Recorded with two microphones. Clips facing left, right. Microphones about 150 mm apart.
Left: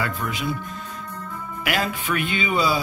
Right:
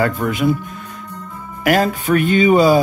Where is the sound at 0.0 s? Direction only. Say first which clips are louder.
Right 10 dB; 45° right (ahead or behind).